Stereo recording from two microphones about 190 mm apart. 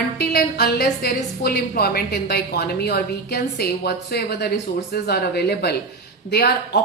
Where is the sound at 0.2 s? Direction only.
55° left (ahead or behind).